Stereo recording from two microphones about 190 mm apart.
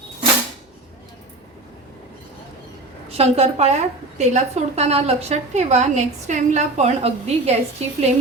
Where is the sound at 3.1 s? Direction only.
35° right (ahead or behind).